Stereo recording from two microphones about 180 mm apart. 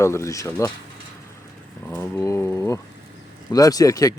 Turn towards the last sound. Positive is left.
turn(degrees=20)  # may be behind; listen again after turning